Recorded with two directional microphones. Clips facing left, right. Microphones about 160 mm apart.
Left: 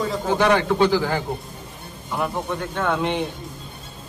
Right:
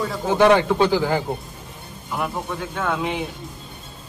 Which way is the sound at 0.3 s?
15° right (ahead or behind).